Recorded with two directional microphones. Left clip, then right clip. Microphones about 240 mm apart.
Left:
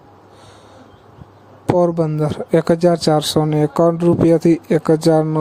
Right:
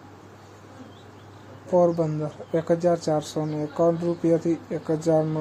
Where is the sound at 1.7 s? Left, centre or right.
Left.